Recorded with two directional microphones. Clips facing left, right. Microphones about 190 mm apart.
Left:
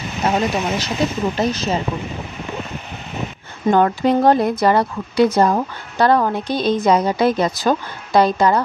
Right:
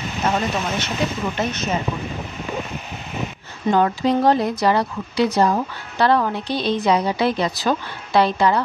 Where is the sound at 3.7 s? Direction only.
55° left (ahead or behind).